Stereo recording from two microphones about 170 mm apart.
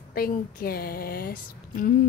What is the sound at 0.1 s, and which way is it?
Speech, 60° left (ahead or behind).